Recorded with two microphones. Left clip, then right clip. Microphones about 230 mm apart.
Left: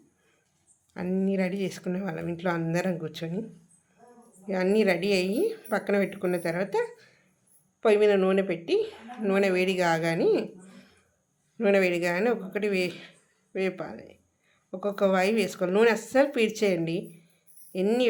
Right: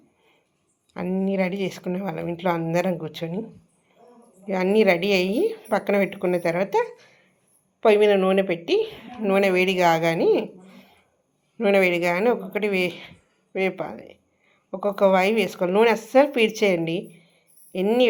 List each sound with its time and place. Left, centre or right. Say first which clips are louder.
0.9 s a woman's voice: right 4 dB; centre
4.4 s a woman's voice: right 5 dB; centre